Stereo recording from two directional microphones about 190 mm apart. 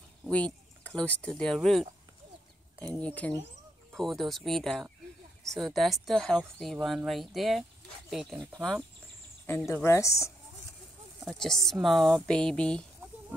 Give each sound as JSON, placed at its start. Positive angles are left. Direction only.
{"t": 0.2, "sound": "speech", "side_deg": 5}
{"t": 9.5, "sound": "speech", "side_deg": 10}
{"t": 11.2, "sound": "speech", "side_deg": 5}